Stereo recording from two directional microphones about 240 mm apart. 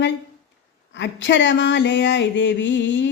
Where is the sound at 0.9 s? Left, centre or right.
Left.